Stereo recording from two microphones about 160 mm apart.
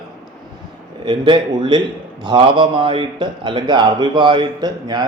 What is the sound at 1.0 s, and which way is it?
A man's voice, 30° right (ahead or behind).